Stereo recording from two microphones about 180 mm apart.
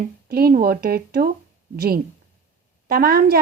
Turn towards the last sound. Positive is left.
turn(degrees=-55)  # may be behind; listen again after turning